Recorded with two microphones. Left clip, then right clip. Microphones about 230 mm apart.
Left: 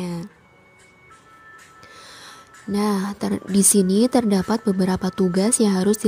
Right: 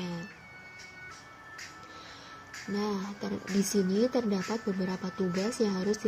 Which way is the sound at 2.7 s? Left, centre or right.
Left.